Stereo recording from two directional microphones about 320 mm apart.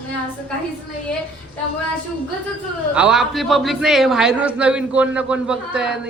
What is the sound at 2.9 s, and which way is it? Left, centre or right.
A man's voice, centre.